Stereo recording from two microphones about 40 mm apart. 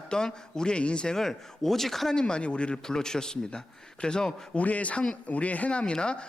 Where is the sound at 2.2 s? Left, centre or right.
Left.